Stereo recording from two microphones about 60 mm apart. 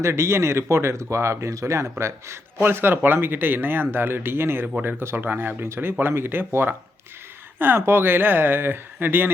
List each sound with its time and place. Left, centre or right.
0.0 s speech: right
7.8 s speech: right